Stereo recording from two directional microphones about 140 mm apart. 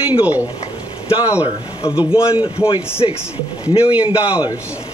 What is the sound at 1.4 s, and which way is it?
Speech, 35° left (ahead or behind).